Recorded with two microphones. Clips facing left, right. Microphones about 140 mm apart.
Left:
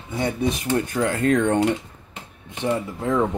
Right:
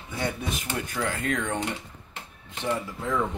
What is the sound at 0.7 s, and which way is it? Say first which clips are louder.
Speech: left 8 dB; 30° left (ahead or behind).